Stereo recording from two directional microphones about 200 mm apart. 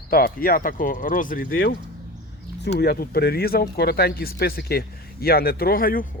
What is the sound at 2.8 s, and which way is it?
Speech, 50° left (ahead or behind).